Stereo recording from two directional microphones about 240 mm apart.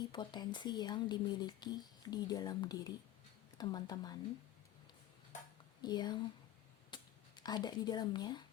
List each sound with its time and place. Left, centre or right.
0.1 s speech: centre
5.8 s speech: centre